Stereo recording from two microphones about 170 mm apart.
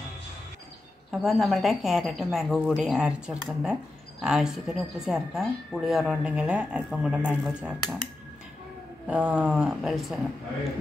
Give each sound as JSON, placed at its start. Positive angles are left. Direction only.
{"t": 1.1, "sound": "speech", "side_deg": 0}
{"t": 9.0, "sound": "speech", "side_deg": -5}